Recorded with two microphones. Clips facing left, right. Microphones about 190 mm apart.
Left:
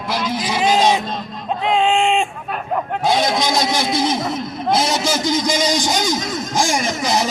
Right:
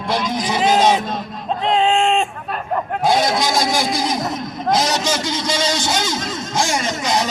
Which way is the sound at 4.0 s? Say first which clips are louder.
Left 2 dB; 5° left (ahead or behind).